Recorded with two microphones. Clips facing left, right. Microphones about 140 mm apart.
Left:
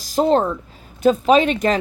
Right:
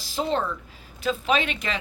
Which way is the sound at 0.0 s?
40° left (ahead or behind).